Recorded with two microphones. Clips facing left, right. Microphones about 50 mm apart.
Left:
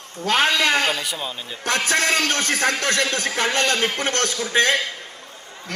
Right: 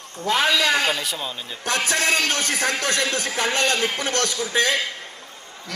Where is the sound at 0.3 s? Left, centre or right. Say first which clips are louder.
Left 1 dB; left.